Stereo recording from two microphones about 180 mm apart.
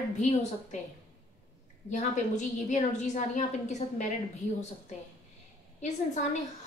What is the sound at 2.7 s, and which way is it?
A woman's voice, 40° left (ahead or behind).